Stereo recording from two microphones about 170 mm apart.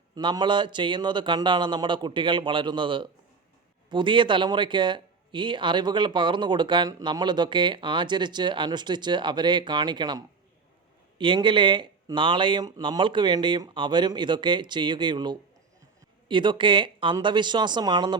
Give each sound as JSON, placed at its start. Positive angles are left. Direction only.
{"t": 0.1, "sound": "speech", "side_deg": -25}